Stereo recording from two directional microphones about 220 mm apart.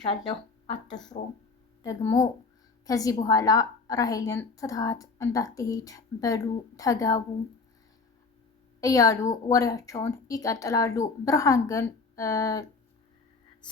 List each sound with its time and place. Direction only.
1.8 s a woman's voice: 15° left (ahead or behind)
8.8 s a woman's voice: 15° left (ahead or behind)